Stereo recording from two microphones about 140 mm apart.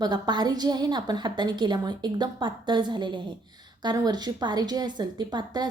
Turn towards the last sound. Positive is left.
turn(degrees=-30)  # may be behind; listen again after turning